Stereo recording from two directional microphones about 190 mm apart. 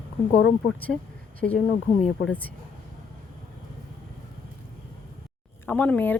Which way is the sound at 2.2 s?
10° left (ahead or behind).